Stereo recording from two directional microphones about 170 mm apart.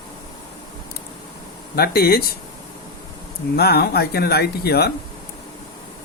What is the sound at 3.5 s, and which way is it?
Speech, 70° left (ahead or behind).